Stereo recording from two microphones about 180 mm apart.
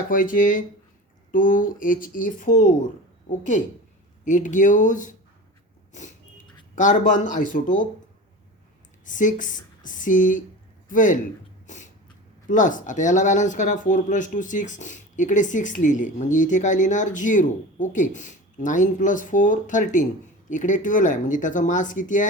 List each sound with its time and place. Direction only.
0.1 s speech: 50° left (ahead or behind)
5.9 s vehicle: 40° left (ahead or behind)
7.3 s speech: 45° left (ahead or behind)
9.0 s a man's voice: 45° left (ahead or behind)
11.6 s a sound: 45° left (ahead or behind)
12.5 s speech: 45° left (ahead or behind)